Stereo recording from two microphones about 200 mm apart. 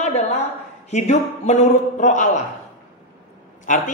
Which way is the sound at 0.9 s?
35° left (ahead or behind).